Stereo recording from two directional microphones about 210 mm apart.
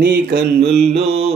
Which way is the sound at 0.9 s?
30° right (ahead or behind).